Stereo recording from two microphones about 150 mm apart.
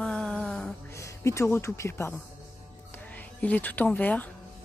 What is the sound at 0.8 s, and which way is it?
Speech, 20° left (ahead or behind).